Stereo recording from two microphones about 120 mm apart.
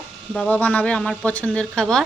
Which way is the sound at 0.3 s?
10° left (ahead or behind).